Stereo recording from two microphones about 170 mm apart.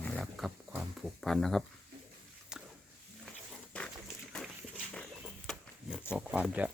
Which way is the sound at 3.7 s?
5° left (ahead or behind).